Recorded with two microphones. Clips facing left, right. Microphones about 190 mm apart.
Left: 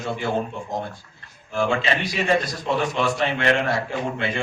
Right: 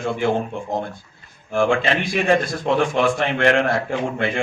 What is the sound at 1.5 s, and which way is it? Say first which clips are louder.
A man's voice: right 4 dB; 50° right (ahead or behind).